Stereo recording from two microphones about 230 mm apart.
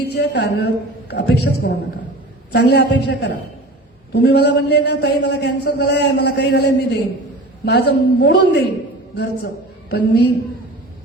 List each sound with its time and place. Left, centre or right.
0.1 s a man's voice: left